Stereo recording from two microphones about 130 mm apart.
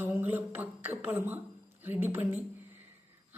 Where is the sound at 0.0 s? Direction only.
15° right (ahead or behind).